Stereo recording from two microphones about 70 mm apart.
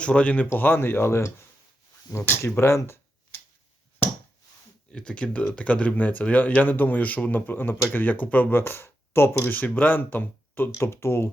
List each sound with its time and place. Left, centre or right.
0.0 s speech: centre
0.5 s speech: left
4.9 s speech: centre; by 9.6 s left
9.6 s speech: left
10.8 s speech: left